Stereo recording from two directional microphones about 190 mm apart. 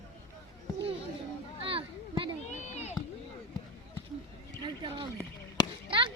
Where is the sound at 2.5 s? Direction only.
35° left (ahead or behind).